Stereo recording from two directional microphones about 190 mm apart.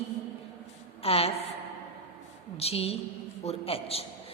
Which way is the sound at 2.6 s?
30° left (ahead or behind).